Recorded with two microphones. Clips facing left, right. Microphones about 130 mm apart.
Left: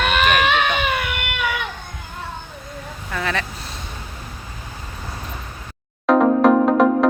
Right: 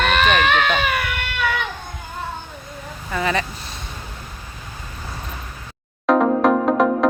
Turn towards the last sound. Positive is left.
turn(degrees=0)  # may be behind; listen again after turning